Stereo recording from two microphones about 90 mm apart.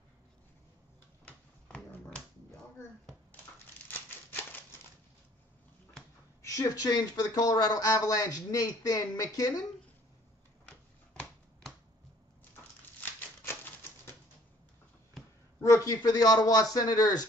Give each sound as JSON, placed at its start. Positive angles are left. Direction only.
{"t": 1.2, "sound": "dog", "side_deg": 15}
{"t": 3.9, "sound": "a sound", "side_deg": 25}
{"t": 6.4, "sound": "speech", "side_deg": 40}
{"t": 15.6, "sound": "speech", "side_deg": 35}